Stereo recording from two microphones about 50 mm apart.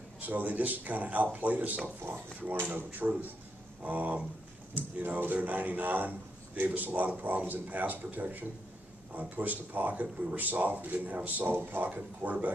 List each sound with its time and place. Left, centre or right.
0.2 s a man's voice: right
2.1 s a man's voice: right